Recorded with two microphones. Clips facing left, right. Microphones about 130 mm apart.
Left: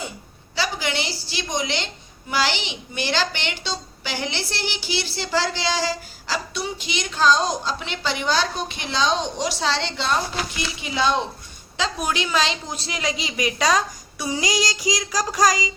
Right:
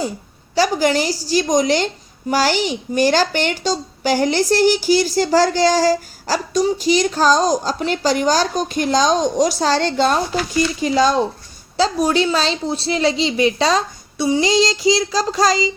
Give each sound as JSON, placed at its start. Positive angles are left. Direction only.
{"t": 0.5, "sound": "a woman's voice", "side_deg": -40}